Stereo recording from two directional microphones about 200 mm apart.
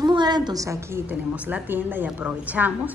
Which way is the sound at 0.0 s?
20° right (ahead or behind).